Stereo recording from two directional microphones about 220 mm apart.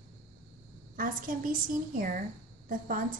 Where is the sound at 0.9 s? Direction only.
40° right (ahead or behind).